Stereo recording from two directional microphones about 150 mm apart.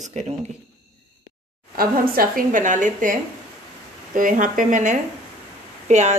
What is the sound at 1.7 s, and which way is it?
A woman's voice, 80° right.